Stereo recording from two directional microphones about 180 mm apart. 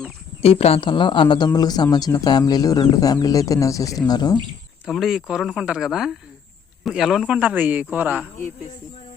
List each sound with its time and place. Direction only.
0.4 s speech: 35° left (ahead or behind)
4.9 s a man's voice: centre (ahead or behind)